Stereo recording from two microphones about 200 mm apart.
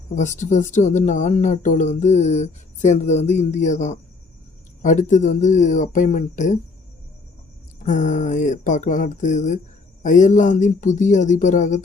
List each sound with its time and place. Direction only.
0.2 s speech: 35° left (ahead or behind)
7.9 s speech: 35° left (ahead or behind)